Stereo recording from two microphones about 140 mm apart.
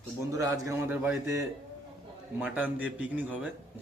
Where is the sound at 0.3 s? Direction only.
20° right (ahead or behind).